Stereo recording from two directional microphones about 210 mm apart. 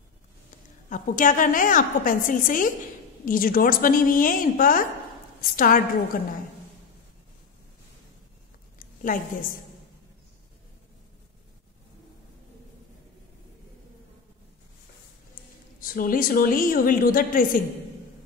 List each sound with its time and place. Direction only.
0.8 s a woman's voice: 40° left (ahead or behind)
8.7 s a sound: 40° left (ahead or behind)
15.8 s a woman's voice: 40° left (ahead or behind)